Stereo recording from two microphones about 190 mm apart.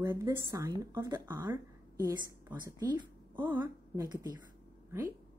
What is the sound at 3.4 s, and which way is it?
Speech, 10° right (ahead or behind).